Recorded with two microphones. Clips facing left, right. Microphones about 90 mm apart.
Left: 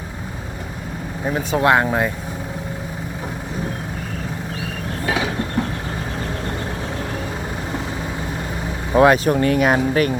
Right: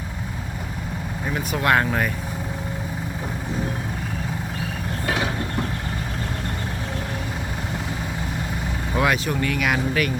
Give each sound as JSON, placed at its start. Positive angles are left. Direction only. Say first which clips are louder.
{"t": 1.3, "sound": "speech", "louder": "left 5 dB", "side_deg": 30}
{"t": 8.9, "sound": "speech", "louder": "left 9 dB", "side_deg": 35}